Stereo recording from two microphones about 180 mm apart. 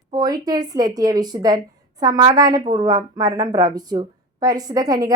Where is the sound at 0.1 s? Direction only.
20° right (ahead or behind).